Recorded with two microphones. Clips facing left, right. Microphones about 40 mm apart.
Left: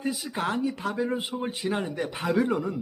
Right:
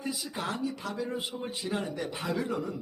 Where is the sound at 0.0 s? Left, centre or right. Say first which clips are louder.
Left 5 dB; left.